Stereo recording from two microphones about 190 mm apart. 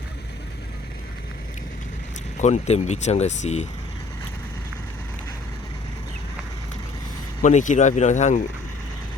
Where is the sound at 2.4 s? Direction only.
35° left (ahead or behind).